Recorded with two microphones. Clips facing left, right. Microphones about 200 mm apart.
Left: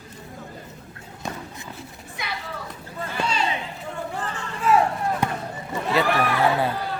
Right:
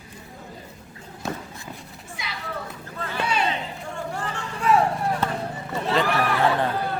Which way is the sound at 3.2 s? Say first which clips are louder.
Right 1 dB; 60° right (ahead or behind).